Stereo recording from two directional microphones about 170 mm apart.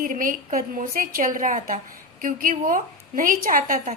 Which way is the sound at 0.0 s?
55° right (ahead or behind).